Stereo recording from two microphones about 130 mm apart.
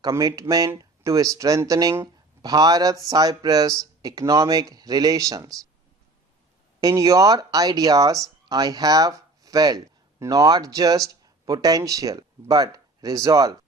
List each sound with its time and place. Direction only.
0.0 s speech: 25° right (ahead or behind)
6.7 s speech: 25° right (ahead or behind)